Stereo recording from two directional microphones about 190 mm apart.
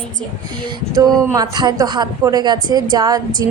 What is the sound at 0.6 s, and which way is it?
Speech, 25° right (ahead or behind).